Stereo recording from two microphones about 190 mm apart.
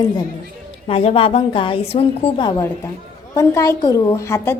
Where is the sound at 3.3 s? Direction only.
15° left (ahead or behind).